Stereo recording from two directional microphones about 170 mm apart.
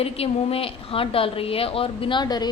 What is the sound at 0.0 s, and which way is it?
A woman's voice, 35° left (ahead or behind).